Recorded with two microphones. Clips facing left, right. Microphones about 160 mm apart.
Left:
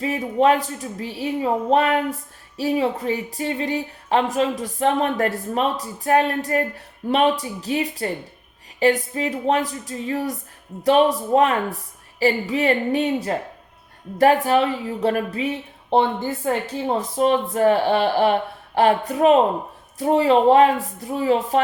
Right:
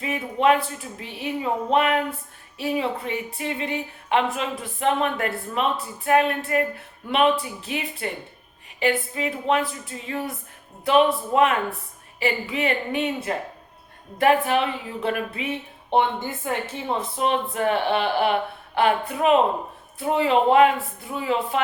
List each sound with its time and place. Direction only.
0.0 s speech: 35° left (ahead or behind)